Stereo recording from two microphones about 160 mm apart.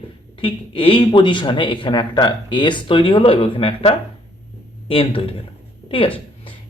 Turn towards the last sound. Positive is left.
turn(degrees=35)  # may be behind; listen again after turning